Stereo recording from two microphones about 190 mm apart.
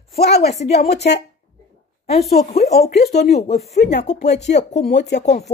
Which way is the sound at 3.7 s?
65° left (ahead or behind).